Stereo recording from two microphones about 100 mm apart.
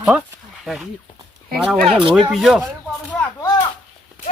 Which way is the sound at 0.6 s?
Centre (ahead or behind).